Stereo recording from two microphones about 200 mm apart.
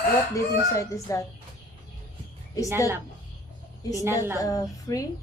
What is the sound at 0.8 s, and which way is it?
Speech, 15° left (ahead or behind).